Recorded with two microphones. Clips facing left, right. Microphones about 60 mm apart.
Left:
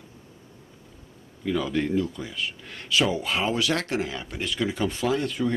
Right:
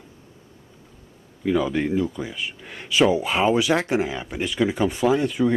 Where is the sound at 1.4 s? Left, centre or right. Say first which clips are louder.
Right 4 dB; centre.